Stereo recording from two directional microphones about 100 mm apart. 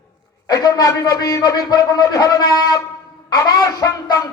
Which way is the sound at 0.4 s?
35° left (ahead or behind).